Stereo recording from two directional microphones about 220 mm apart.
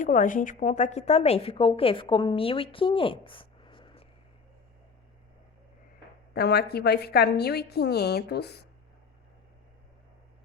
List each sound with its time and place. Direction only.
0.0 s a woman's voice: 35° left (ahead or behind)
6.3 s a woman's voice: 45° left (ahead or behind)